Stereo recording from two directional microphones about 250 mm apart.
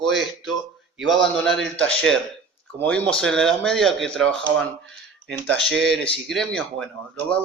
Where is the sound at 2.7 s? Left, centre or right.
Centre.